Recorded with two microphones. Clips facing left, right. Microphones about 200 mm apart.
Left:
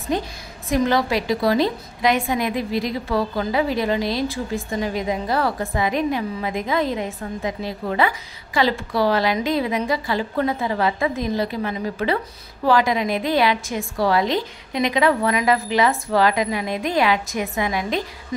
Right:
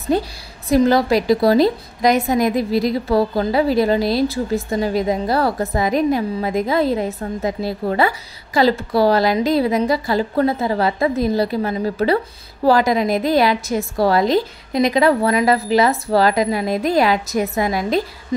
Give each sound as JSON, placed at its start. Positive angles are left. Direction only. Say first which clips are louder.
{"t": 0.7, "sound": "a woman's voice", "louder": "right 5 dB", "side_deg": -35}